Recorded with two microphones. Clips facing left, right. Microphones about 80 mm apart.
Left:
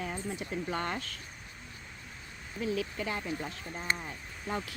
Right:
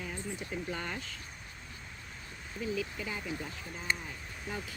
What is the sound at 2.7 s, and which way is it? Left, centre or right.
Speech, left.